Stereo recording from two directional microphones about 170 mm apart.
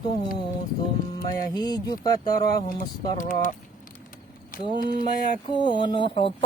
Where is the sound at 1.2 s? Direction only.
25° left (ahead or behind).